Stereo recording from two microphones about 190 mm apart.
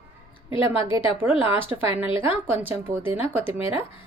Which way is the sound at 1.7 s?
15° right (ahead or behind).